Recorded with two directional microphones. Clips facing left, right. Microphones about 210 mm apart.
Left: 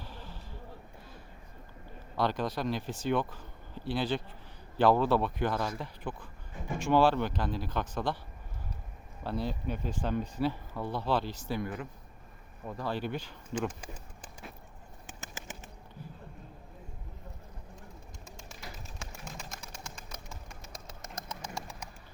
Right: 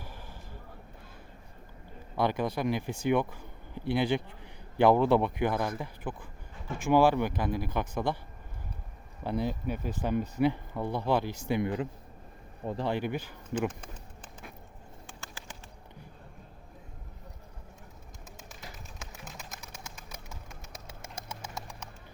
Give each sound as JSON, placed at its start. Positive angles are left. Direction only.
{"t": 2.1, "sound": "speech", "side_deg": -10}
{"t": 9.2, "sound": "speech", "side_deg": -15}
{"t": 12.9, "sound": "speech", "side_deg": -15}
{"t": 15.2, "sound": "bird flight", "side_deg": 20}
{"t": 18.9, "sound": "bird", "side_deg": -5}
{"t": 21.5, "sound": "bird", "side_deg": 5}